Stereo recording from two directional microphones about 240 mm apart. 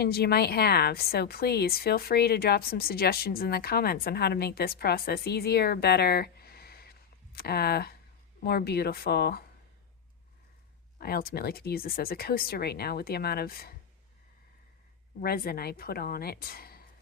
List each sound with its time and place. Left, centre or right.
0.0 s a woman's voice: left
10.9 s a woman's voice: left
15.2 s a woman's voice: left